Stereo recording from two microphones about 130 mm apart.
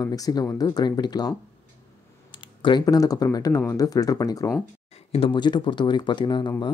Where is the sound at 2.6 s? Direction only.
30° left (ahead or behind).